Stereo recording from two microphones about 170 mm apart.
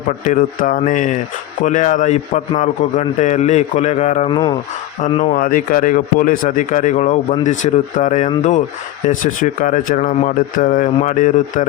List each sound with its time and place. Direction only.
0.3 s speech: 50° left (ahead or behind)
4.3 s speech: 25° left (ahead or behind)
5.0 s speech: 45° left (ahead or behind)